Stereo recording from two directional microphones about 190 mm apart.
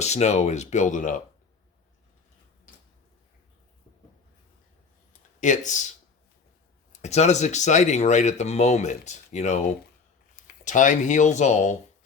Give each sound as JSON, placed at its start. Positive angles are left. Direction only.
{"t": 0.0, "sound": "speech", "side_deg": 35}
{"t": 5.4, "sound": "speech", "side_deg": 40}
{"t": 7.0, "sound": "speech", "side_deg": 35}